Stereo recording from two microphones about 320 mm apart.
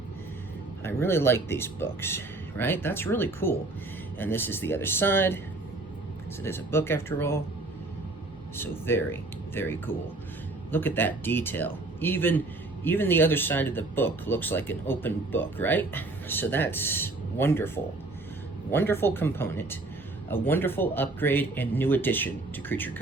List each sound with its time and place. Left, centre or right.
0.9 s speech: centre
6.4 s speech: centre
8.5 s speech: centre
18.7 s speech: centre